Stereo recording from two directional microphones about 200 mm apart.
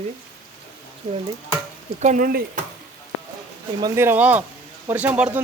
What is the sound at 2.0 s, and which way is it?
Speech, 40° right (ahead or behind).